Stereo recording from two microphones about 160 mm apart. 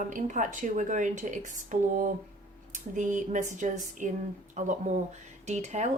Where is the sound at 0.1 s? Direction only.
50° right (ahead or behind).